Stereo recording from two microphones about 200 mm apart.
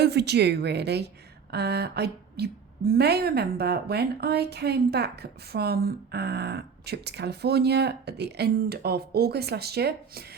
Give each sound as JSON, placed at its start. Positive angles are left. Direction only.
{"t": 0.0, "sound": "a woman's voice", "side_deg": -55}